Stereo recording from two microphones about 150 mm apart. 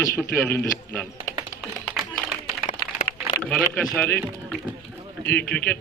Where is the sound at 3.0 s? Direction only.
25° left (ahead or behind).